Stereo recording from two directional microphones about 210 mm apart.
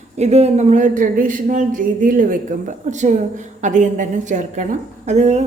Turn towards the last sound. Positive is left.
turn(degrees=-30)  # may be behind; listen again after turning